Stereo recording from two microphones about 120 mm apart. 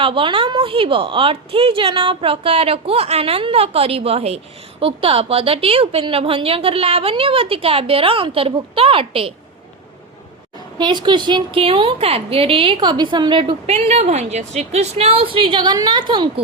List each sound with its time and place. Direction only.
0.0 s a woman's voice: 45° right (ahead or behind)
10.8 s a woman's voice: 40° right (ahead or behind)